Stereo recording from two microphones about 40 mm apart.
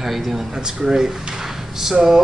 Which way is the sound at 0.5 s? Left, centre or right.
Centre.